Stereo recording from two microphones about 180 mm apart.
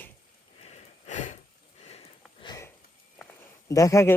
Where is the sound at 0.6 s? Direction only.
40° left (ahead or behind).